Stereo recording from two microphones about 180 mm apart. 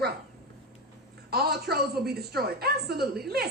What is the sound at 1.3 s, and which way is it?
A woman's voice, 60° right (ahead or behind).